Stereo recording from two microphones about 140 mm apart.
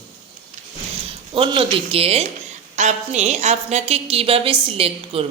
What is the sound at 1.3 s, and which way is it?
Speech, 40° right (ahead or behind).